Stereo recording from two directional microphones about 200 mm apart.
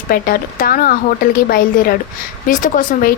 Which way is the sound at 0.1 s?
45° left (ahead or behind).